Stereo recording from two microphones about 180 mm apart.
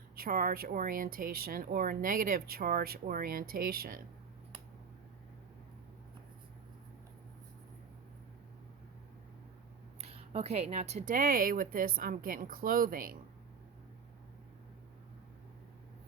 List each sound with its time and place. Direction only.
0.2 s speech: 55° right (ahead or behind)
10.0 s speech: 35° right (ahead or behind); by 13.1 s 50° right (ahead or behind)